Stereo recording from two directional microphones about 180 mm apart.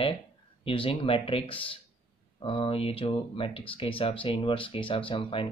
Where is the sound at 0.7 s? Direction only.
30° left (ahead or behind).